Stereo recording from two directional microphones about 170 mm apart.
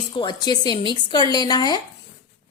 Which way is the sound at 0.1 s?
30° left (ahead or behind).